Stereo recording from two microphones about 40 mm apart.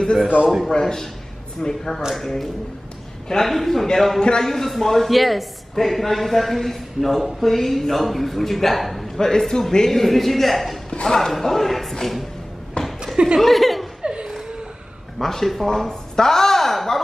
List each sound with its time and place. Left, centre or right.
0.7 s speech: centre
4.2 s speech: left
4.5 s speech: centre
9.5 s speech: centre
10.9 s a sound: centre
11.1 s speech: centre
13.0 s laughter: centre
13.4 s chuckle: centre
14.0 s laughter: right
15.1 s speech: centre